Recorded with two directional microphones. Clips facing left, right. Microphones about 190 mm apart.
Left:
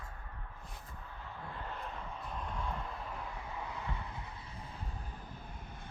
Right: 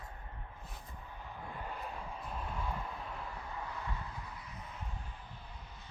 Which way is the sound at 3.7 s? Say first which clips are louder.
Left 1 dB; 20° left (ahead or behind).